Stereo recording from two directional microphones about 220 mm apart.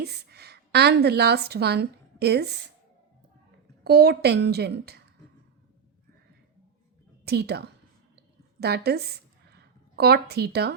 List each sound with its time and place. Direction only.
0.0 s a woman's voice: 50° right (ahead or behind)
3.8 s a woman's voice: 45° right (ahead or behind)
7.3 s a woman's voice: 45° right (ahead or behind)